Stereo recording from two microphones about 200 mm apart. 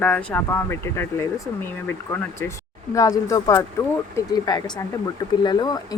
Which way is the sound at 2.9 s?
15° left (ahead or behind).